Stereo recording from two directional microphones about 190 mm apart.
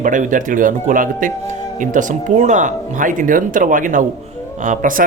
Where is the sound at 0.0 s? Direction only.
45° right (ahead or behind).